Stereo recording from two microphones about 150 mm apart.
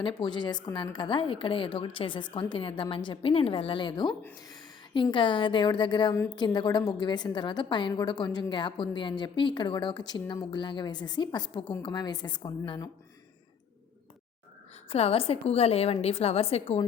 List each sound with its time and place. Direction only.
0.2 s a woman's voice: 30° left (ahead or behind)
14.8 s a woman's voice: 40° left (ahead or behind)